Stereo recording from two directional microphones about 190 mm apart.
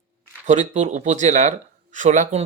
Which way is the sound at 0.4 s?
35° right (ahead or behind).